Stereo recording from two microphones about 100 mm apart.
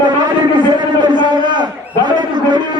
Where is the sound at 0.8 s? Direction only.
50° right (ahead or behind).